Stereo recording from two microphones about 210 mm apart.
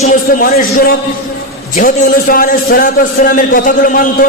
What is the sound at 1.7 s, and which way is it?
A man's voice, 40° left (ahead or behind).